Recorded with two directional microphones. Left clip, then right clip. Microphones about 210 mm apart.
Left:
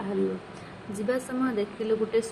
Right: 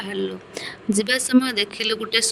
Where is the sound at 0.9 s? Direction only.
50° right (ahead or behind).